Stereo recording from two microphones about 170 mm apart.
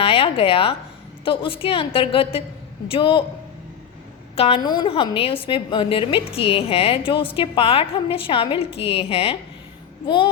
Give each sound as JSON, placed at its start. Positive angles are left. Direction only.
{"t": 0.0, "sound": "a woman's voice", "side_deg": 35}
{"t": 4.4, "sound": "a woman's voice", "side_deg": 35}